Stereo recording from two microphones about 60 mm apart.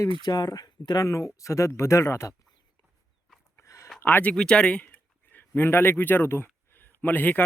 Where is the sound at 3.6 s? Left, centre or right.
Left.